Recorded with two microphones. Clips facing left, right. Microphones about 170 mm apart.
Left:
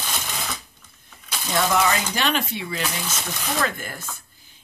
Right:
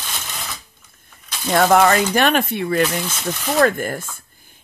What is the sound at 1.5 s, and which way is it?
Speech, 55° right (ahead or behind).